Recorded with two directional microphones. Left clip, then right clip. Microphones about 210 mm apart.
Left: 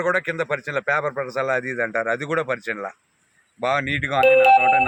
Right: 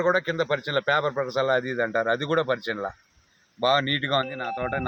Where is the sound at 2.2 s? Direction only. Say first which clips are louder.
Left 1 dB; 10° right (ahead or behind).